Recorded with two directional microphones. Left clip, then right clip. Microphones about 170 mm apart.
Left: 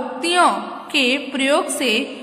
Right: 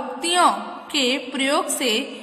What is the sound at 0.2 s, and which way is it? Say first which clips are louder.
A woman's voice: left 2 dB; 15° right (ahead or behind).